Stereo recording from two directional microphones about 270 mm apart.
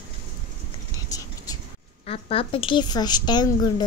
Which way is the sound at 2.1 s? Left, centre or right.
Left.